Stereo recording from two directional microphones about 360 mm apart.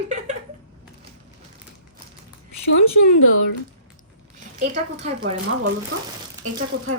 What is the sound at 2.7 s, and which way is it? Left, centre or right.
Speech, left.